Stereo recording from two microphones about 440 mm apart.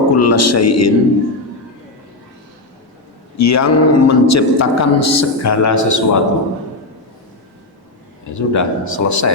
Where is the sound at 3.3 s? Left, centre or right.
Left.